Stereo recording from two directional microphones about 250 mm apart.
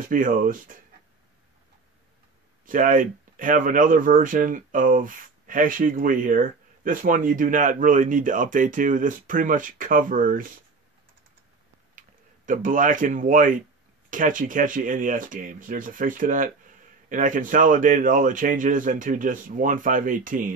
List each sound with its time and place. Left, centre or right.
0.0 s speech: right
2.6 s speech: right
12.4 s speech: right